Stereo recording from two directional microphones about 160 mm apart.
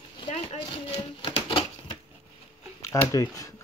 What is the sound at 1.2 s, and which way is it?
Typewriter, 35° left (ahead or behind).